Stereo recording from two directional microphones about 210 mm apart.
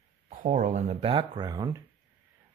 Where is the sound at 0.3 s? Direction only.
35° right (ahead or behind).